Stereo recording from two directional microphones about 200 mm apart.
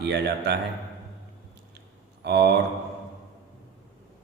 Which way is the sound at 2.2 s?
55° right (ahead or behind).